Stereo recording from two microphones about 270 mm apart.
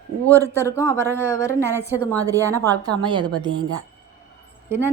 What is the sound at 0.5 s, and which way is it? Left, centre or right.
Speech, centre.